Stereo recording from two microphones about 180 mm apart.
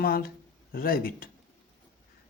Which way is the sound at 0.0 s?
55° left (ahead or behind).